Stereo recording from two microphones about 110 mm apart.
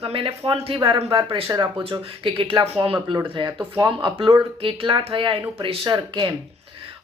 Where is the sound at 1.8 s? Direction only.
55° right (ahead or behind).